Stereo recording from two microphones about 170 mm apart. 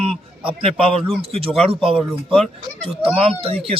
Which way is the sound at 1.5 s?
5° right (ahead or behind).